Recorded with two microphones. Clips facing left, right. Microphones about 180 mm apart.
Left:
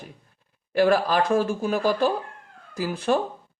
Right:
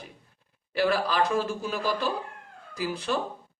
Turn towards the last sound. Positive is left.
turn(degrees=50)  # may be behind; listen again after turning